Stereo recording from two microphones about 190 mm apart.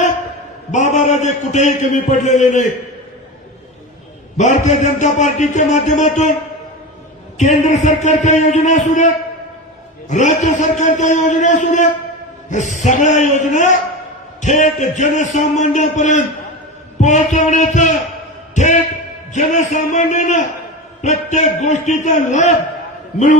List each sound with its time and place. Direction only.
0.7 s a man's voice: 40° left (ahead or behind)
4.4 s a man's voice: 40° left (ahead or behind)
7.3 s a man's voice: 40° left (ahead or behind)
18.5 s a sound: 40° left (ahead or behind)
19.3 s a man's voice: 40° left (ahead or behind)